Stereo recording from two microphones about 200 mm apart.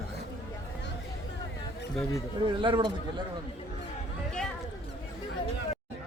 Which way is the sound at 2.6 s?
25° right (ahead or behind).